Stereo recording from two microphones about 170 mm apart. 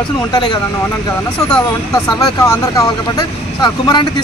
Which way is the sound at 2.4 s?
15° left (ahead or behind).